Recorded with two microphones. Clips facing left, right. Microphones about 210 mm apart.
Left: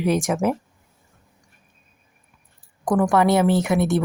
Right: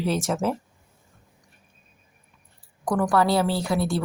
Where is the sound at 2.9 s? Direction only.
15° left (ahead or behind).